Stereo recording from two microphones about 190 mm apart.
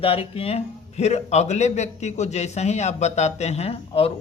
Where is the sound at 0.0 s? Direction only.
30° left (ahead or behind).